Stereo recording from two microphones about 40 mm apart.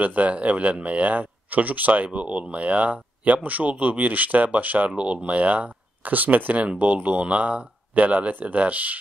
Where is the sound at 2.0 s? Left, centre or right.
Right.